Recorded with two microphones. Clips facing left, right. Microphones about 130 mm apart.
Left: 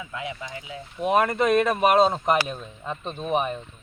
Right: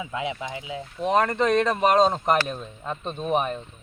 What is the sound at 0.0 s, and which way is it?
Speech, 20° right (ahead or behind).